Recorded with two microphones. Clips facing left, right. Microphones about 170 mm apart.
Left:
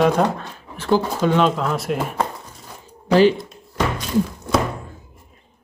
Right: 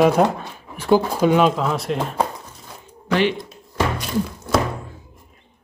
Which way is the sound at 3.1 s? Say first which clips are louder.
Left 5 dB; 35° left (ahead or behind).